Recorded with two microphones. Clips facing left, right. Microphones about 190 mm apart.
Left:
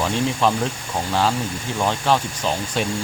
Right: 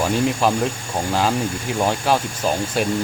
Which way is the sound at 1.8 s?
10° right (ahead or behind).